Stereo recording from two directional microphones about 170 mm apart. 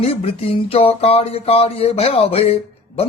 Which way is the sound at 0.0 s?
35° left (ahead or behind).